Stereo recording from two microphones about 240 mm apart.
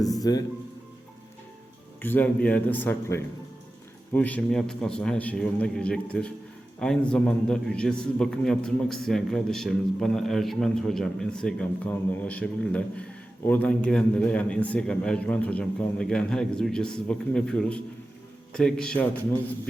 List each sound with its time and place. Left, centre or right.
0.2 s speech: centre
2.0 s a man's voice: centre